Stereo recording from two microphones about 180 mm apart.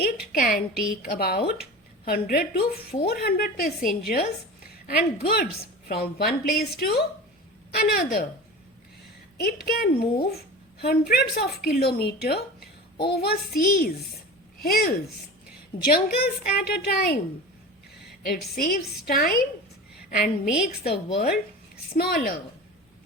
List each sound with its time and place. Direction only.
0.3 s a woman's voice: 50° left (ahead or behind)
9.4 s a woman's voice: 60° left (ahead or behind)
18.3 s a woman's voice: 60° left (ahead or behind)
20.1 s a woman's voice: 45° left (ahead or behind)
20.9 s a woman's voice: 60° left (ahead or behind)